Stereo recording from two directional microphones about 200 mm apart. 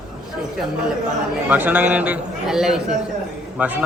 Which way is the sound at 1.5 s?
10° right (ahead or behind).